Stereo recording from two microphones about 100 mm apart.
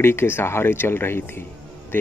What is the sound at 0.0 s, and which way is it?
Speech, 25° left (ahead or behind).